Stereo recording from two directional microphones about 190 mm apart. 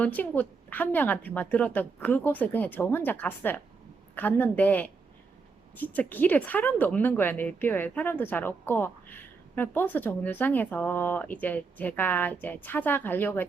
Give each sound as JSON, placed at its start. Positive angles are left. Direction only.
{"t": 0.0, "sound": "speech", "side_deg": 10}